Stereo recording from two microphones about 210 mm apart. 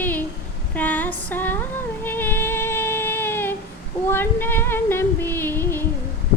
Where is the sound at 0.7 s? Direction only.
5° left (ahead or behind).